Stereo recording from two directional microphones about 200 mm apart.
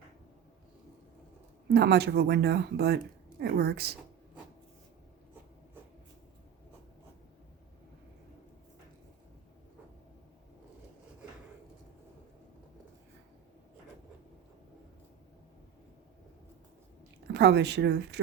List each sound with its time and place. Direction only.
1.7 s speech: 55° right (ahead or behind)
17.3 s speech: 55° right (ahead or behind)